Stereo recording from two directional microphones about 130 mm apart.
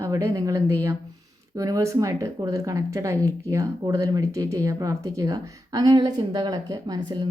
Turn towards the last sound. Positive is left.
turn(degrees=-30)  # may be behind; listen again after turning